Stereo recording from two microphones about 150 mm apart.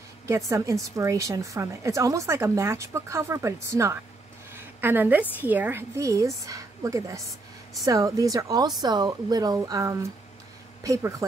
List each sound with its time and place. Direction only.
0.3 s a woman's voice: 20° right (ahead or behind)
4.6 s a sound: 15° right (ahead or behind)
5.4 s a woman's voice: 10° right (ahead or behind)